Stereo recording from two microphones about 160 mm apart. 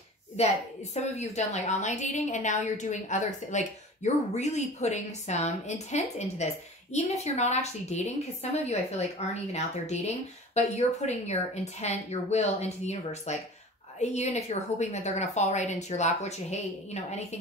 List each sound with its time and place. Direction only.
0.4 s a woman's voice: 40° left (ahead or behind)